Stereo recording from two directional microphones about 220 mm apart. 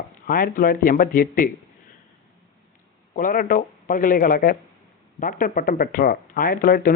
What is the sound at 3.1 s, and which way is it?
Speech, 40° left (ahead or behind).